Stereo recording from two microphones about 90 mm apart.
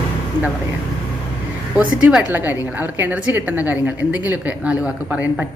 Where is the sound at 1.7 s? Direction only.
15° right (ahead or behind).